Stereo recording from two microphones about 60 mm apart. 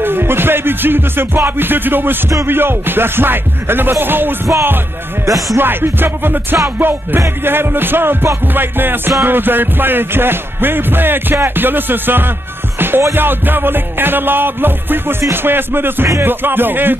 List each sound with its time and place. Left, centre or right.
0.0 s music: right
5.6 s music: right